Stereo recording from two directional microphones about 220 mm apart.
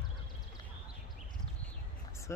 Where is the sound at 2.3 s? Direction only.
10° left (ahead or behind).